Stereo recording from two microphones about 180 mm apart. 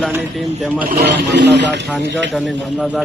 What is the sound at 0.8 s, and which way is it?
Speech, 60° right (ahead or behind).